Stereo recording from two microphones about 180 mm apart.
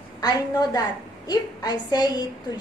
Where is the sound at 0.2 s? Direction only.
20° left (ahead or behind).